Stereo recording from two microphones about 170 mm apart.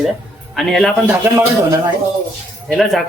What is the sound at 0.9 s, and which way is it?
Speech, 10° right (ahead or behind).